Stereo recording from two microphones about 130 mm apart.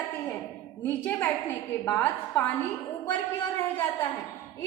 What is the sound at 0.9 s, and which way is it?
A woman's voice, 15° left (ahead or behind).